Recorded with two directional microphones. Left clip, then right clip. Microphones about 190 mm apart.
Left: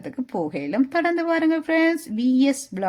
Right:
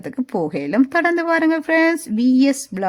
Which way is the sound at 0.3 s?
35° right (ahead or behind).